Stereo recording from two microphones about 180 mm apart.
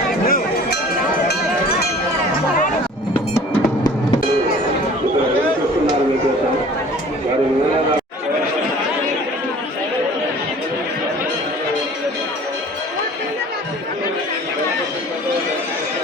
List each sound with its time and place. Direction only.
0.3 s cowbell: 55° left (ahead or behind)